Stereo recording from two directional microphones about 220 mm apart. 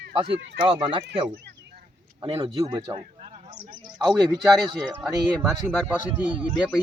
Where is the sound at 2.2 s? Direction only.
25° right (ahead or behind).